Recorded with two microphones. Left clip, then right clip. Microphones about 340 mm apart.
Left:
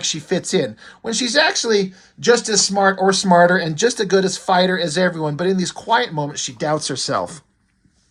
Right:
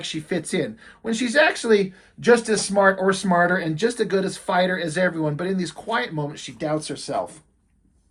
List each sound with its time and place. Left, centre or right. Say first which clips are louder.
0.0 s speech: left 6 dB; centre